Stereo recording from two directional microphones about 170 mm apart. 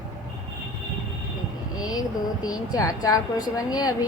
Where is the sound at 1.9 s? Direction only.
20° left (ahead or behind).